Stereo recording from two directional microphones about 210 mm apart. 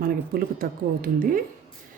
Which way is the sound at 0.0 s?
45° right (ahead or behind).